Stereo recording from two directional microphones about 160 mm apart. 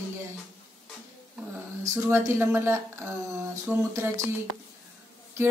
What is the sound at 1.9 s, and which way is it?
Speech, 15° right (ahead or behind).